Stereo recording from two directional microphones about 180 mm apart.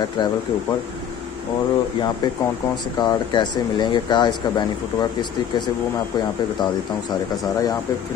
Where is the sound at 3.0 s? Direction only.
25° left (ahead or behind).